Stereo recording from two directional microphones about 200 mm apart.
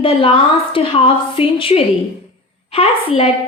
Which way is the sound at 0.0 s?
25° left (ahead or behind).